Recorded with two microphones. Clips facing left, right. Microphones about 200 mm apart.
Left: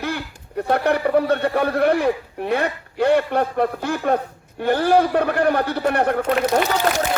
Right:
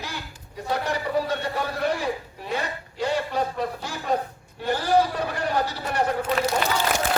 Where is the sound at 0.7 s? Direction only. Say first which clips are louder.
Left 8 dB; 60° left (ahead or behind).